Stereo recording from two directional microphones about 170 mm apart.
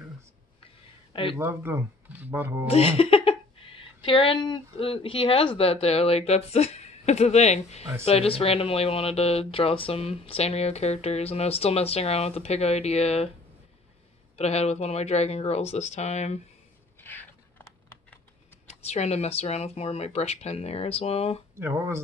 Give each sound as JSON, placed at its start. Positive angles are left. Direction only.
{"t": 1.4, "sound": "speech", "side_deg": -15}
{"t": 2.7, "sound": "speech", "side_deg": 35}
{"t": 14.3, "sound": "speech", "side_deg": 40}
{"t": 17.0, "sound": "a sound", "side_deg": 10}
{"t": 18.7, "sound": "speech", "side_deg": 40}
{"t": 21.5, "sound": "speech", "side_deg": -15}